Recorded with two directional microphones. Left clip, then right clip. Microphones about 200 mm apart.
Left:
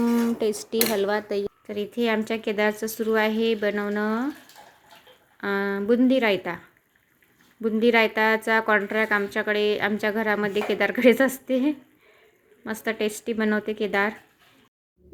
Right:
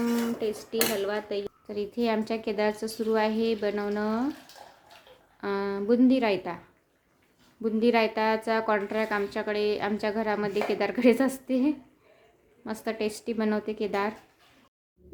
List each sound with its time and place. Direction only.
0.0 s a sound: 35° left (ahead or behind)
0.9 s speech: 30° left (ahead or behind)
1.5 s a woman's voice: 10° left (ahead or behind)
5.4 s a woman's voice: 10° left (ahead or behind)
7.6 s a woman's voice: 10° left (ahead or behind)